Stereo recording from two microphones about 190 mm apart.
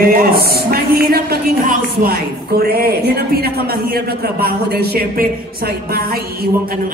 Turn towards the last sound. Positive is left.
turn(degrees=-55)  # may be behind; listen again after turning